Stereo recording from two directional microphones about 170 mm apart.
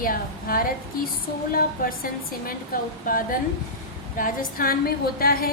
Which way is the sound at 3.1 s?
55° left (ahead or behind).